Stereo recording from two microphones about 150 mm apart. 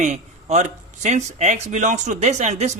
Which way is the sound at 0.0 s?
50° right (ahead or behind).